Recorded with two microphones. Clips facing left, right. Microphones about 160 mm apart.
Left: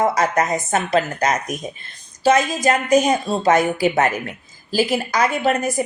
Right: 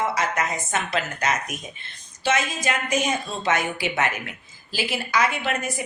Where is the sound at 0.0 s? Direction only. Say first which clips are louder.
Left 6 dB; 40° left (ahead or behind).